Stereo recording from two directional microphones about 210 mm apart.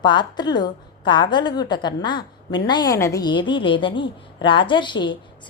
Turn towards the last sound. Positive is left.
turn(degrees=20)  # may be behind; listen again after turning